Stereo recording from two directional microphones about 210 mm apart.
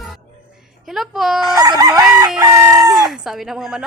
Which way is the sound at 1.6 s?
15° right (ahead or behind).